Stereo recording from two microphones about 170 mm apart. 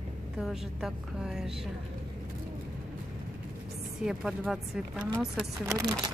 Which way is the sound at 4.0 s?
5° right (ahead or behind).